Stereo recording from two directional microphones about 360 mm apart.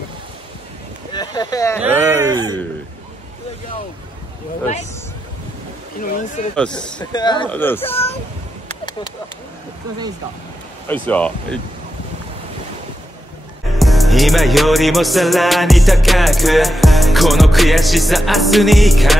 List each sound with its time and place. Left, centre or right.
1.1 s speech: centre
1.8 s speech: centre
5.9 s speech: left
6.5 s music: centre
10.9 s music: centre
13.7 s music: centre